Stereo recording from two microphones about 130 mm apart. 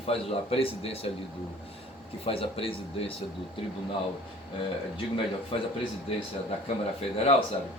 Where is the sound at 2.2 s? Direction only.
45° left (ahead or behind).